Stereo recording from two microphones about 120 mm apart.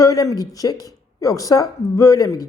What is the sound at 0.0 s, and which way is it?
Speech, 30° left (ahead or behind).